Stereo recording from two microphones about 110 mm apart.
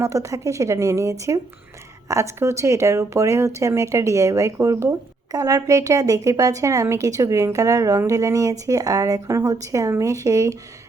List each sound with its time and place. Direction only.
0.0 s speech: 30° right (ahead or behind)